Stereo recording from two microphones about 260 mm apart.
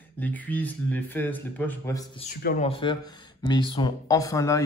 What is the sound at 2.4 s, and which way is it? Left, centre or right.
Speech, left.